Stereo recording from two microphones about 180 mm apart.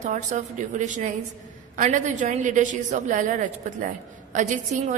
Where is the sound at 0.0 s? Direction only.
40° right (ahead or behind).